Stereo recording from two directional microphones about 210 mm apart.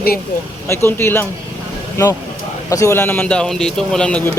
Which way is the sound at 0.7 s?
10° left (ahead or behind).